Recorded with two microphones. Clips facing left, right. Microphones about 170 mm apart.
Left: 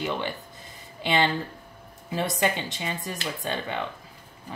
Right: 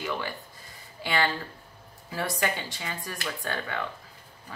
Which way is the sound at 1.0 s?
20° left (ahead or behind).